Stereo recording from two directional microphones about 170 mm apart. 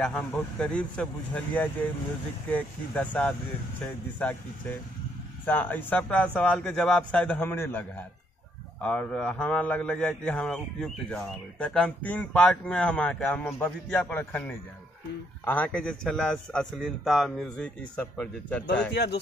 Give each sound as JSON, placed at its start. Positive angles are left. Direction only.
{"t": 0.0, "sound": "speech", "side_deg": 5}
{"t": 8.8, "sound": "a man's voice", "side_deg": 5}
{"t": 18.9, "sound": "speech", "side_deg": 75}